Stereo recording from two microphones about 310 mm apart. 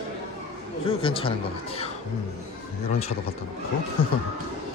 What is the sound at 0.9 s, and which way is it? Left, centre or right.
Speech, centre.